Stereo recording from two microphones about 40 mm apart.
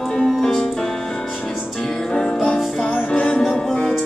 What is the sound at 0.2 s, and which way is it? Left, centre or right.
Music, centre.